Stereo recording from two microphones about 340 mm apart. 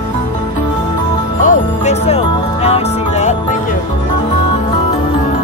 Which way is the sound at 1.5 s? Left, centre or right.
Centre.